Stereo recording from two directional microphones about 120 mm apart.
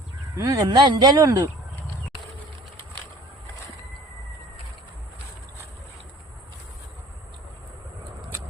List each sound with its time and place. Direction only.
0.3 s speech: 30° right (ahead or behind)